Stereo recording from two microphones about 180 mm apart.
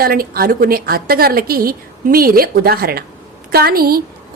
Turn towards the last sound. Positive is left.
turn(degrees=-55)  # may be behind; listen again after turning